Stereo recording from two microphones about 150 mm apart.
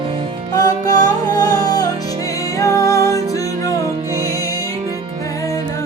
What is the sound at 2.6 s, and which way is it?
Music, 20° left (ahead or behind).